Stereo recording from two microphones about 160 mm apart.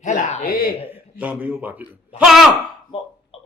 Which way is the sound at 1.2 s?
10° right (ahead or behind).